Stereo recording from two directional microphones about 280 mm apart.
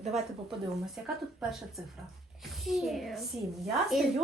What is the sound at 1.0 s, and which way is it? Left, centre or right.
A child's voice, centre.